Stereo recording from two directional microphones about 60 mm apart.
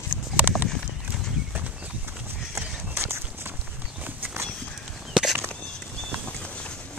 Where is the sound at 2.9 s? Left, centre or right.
Right.